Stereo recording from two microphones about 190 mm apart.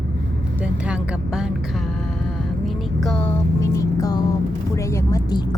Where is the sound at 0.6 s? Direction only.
5° right (ahead or behind).